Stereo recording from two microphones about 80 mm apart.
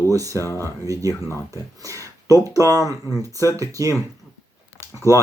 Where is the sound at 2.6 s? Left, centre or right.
Left.